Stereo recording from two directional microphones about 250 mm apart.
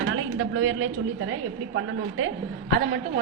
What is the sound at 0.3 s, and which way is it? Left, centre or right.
A woman's voice, right.